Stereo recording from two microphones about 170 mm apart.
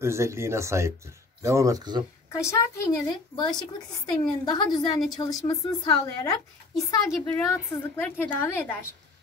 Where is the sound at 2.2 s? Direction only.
15° left (ahead or behind).